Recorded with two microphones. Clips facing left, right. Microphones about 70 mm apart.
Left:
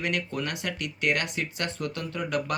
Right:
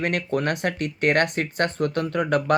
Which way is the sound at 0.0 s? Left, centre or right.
Right.